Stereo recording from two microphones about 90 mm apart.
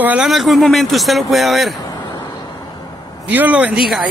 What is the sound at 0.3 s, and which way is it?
Speech, centre (ahead or behind).